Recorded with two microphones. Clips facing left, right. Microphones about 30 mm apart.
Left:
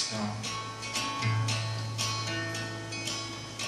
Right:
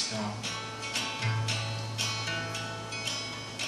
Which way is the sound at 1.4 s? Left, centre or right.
Centre.